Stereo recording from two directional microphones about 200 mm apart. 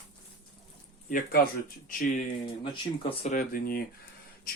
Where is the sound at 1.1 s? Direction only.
45° left (ahead or behind).